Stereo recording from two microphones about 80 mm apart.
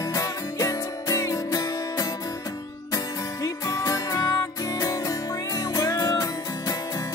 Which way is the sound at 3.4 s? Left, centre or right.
Left.